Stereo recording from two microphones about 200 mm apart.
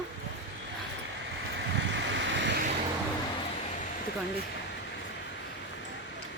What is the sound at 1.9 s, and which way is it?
Vehicle, 60° right (ahead or behind).